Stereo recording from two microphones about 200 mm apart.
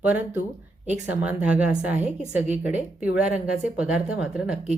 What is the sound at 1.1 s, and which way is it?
A woman's voice, 5° right (ahead or behind).